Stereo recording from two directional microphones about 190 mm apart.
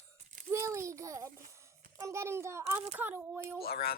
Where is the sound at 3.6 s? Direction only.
55° left (ahead or behind).